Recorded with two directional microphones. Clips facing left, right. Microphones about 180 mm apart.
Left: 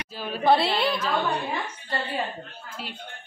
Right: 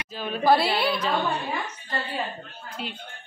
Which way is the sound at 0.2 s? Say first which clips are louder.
Even; centre (ahead or behind).